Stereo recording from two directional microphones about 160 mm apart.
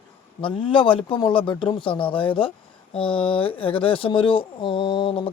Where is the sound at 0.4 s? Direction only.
30° left (ahead or behind).